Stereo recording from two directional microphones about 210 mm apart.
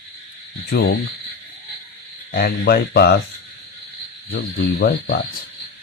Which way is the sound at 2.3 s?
45° left (ahead or behind).